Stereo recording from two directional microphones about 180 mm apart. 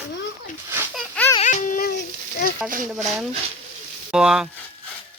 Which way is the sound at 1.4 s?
45° left (ahead or behind).